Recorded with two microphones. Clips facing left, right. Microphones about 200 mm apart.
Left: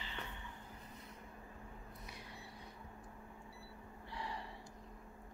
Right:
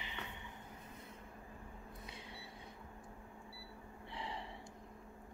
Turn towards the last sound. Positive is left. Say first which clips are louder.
# even
turn(degrees=-25)  # may be behind; listen again after turning